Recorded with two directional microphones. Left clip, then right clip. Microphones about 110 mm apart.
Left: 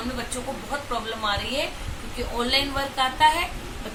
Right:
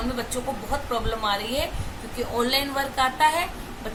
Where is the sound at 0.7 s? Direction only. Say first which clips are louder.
Right 1 dB; 20° right (ahead or behind).